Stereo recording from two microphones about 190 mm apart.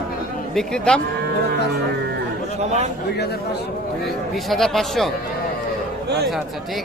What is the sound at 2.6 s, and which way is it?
Speech, 35° right (ahead or behind).